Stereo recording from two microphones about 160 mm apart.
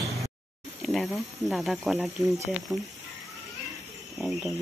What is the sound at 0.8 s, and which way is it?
Speech, centre (ahead or behind).